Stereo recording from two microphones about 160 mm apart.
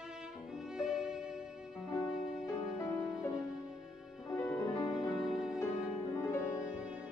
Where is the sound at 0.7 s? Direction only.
5° right (ahead or behind).